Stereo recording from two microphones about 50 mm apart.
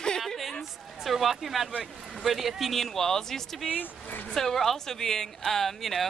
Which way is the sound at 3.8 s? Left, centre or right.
Left.